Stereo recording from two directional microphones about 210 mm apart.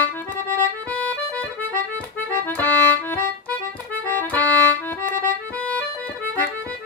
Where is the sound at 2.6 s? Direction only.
10° left (ahead or behind).